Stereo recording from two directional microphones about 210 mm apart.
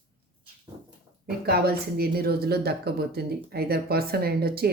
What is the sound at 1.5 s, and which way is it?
Speech, 50° right (ahead or behind).